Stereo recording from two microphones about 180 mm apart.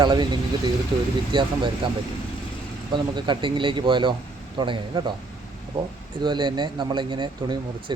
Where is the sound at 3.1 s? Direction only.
25° right (ahead or behind).